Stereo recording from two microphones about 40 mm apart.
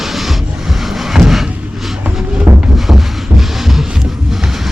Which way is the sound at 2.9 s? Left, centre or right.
Centre.